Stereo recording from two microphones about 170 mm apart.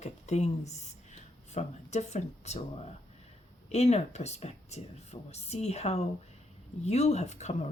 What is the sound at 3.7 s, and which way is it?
Speech, 40° left (ahead or behind).